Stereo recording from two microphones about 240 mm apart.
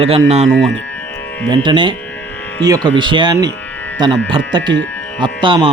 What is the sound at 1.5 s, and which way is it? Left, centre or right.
Speech, centre.